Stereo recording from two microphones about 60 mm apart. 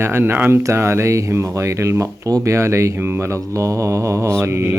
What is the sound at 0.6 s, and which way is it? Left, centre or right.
Speech, right.